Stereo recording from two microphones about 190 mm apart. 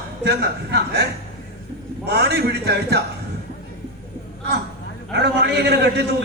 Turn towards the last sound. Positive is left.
turn(degrees=-60)  # may be behind; listen again after turning